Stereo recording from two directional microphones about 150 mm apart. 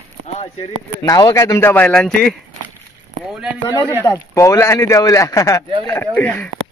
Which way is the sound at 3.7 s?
15° left (ahead or behind).